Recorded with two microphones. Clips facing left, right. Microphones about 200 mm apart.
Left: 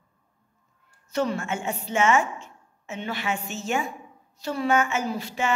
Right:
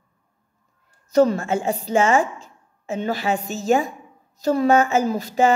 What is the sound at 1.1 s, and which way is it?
A woman's voice, 40° right (ahead or behind).